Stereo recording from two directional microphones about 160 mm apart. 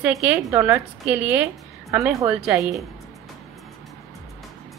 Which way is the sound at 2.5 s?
20° right (ahead or behind).